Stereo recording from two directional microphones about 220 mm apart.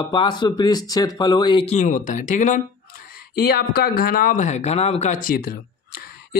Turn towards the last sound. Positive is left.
turn(degrees=45)  # may be behind; listen again after turning